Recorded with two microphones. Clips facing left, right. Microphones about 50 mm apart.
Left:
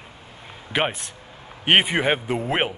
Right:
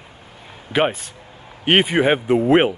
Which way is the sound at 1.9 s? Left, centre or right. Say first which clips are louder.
Right 5 dB; centre.